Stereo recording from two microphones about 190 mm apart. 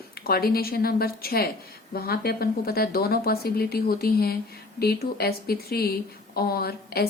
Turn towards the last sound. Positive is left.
turn(degrees=55)  # may be behind; listen again after turning